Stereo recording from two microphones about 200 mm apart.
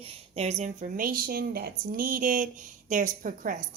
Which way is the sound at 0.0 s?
35° right (ahead or behind).